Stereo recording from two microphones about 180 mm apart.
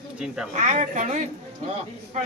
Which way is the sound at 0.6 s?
40° right (ahead or behind).